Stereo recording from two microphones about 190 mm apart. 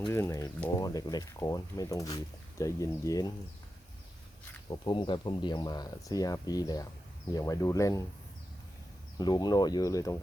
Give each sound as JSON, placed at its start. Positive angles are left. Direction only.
{"t": 0.1, "sound": "speech", "side_deg": 15}
{"t": 4.7, "sound": "speech", "side_deg": 25}
{"t": 9.1, "sound": "speech", "side_deg": 20}